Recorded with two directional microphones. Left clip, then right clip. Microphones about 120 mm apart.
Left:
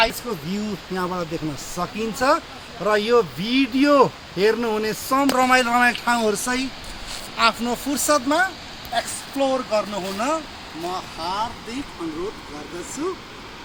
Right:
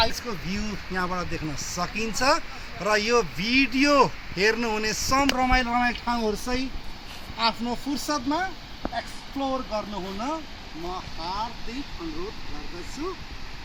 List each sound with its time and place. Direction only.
0.5 s speech: 50° right (ahead or behind)
1.7 s a man's voice: 40° right (ahead or behind)
5.3 s speech: 10° left (ahead or behind)
7.3 s speech: centre (ahead or behind)
7.9 s speech: 10° left (ahead or behind)